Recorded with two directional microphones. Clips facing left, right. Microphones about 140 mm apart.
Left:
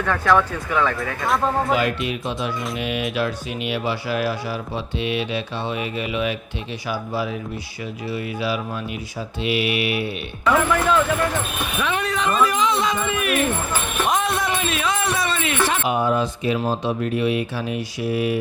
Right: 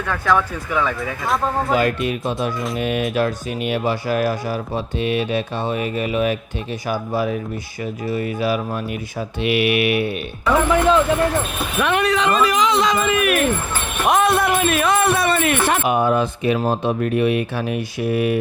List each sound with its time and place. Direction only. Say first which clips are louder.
0.1 s speech: left 1 dB; 5° right (ahead or behind)
0.9 s speech: even; centre (ahead or behind)
1.7 s speech: right 3 dB; 45° right (ahead or behind)
9.4 s speech: right 4 dB; 60° right (ahead or behind)
10.7 s speech: right 4 dB; 25° right (ahead or behind)
11.8 s speech: right 6 dB; 65° right (ahead or behind)
14.1 s music: right 7 dB; 60° right (ahead or behind)
15.6 s speech: right 3 dB; 55° right (ahead or behind)